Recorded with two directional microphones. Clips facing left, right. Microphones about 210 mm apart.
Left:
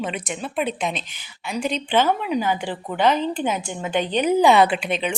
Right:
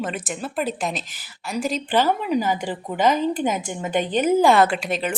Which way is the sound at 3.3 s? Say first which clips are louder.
Right 1 dB; 45° right (ahead or behind).